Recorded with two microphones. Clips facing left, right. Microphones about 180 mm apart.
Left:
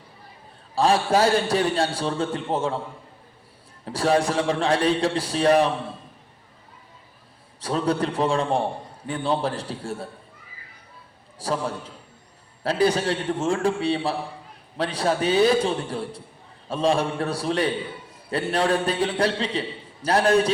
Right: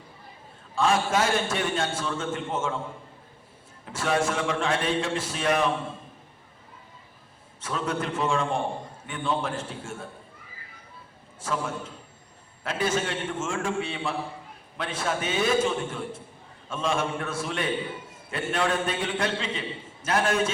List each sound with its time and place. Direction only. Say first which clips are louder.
0.8 s a man's voice: left 4 dB; 35° left (ahead or behind)
3.8 s a man's voice: left 5 dB; 35° left (ahead or behind)
7.6 s a man's voice: left 6 dB; 35° left (ahead or behind)
11.3 s a man's voice: left 3 dB; 35° left (ahead or behind)